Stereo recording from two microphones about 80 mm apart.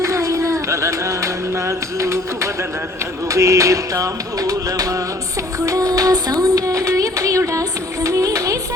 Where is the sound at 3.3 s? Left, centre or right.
Right.